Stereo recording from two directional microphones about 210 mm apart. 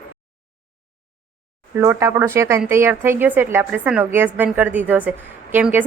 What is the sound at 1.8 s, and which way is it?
Speech, 15° right (ahead or behind).